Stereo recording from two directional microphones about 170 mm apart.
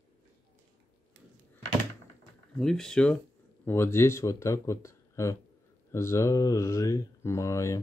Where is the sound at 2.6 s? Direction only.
5° left (ahead or behind).